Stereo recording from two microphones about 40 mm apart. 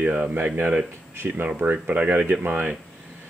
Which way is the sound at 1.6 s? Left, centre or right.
Right.